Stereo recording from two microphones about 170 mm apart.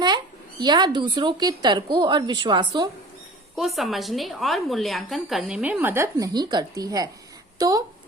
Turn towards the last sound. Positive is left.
turn(degrees=-20)  # may be behind; listen again after turning